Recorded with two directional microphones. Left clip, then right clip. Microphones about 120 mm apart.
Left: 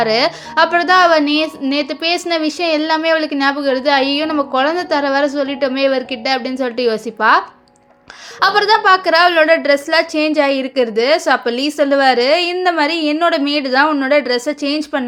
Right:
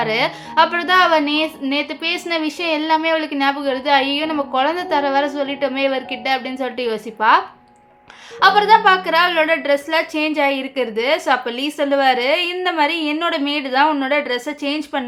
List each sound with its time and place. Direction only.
0.0 s a woman's voice: 40° left (ahead or behind)